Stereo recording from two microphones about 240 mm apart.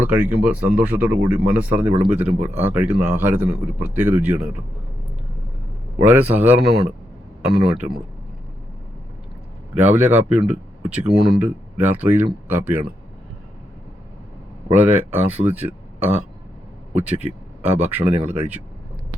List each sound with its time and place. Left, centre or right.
0.0 s speech: centre
6.0 s speech: centre
9.7 s speech: centre
14.7 s speech: centre